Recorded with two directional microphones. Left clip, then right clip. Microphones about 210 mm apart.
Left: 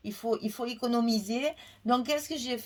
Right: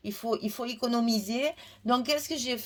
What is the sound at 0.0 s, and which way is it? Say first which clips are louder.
A woman's voice: even; 35° right (ahead or behind).